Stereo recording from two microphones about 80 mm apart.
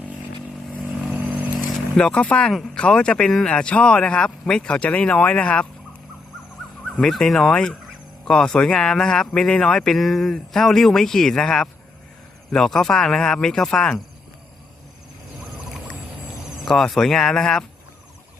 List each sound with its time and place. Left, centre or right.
1.5 s vehicle: centre
2.7 s speech: centre
6.9 s speech: centre
16.6 s speech: centre